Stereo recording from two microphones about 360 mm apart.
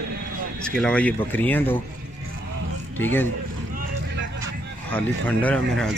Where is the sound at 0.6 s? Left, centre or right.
Centre.